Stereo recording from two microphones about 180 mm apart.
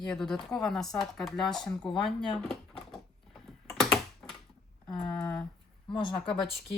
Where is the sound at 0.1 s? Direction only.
5° left (ahead or behind).